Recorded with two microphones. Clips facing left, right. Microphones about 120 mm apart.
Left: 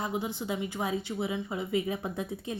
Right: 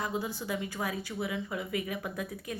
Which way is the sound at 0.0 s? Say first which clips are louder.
Left 1 dB; 20° left (ahead or behind).